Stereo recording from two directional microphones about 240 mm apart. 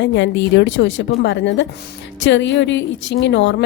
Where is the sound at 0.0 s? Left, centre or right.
Left.